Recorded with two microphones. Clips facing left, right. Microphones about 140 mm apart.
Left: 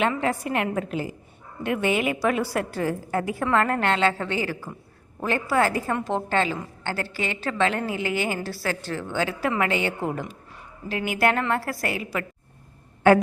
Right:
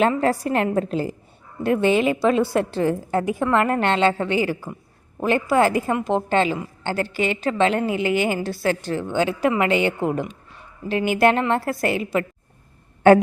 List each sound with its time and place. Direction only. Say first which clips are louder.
0.0 s a woman's voice: right 5 dB; 35° right (ahead or behind)